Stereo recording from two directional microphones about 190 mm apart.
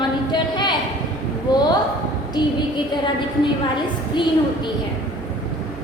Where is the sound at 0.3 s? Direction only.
25° left (ahead or behind).